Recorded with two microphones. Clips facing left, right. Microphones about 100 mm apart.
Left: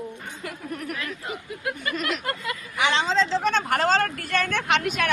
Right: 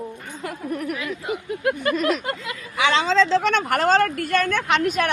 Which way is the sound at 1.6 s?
55° right (ahead or behind).